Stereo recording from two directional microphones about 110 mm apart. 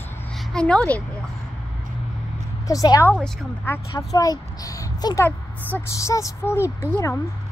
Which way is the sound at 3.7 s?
20° left (ahead or behind).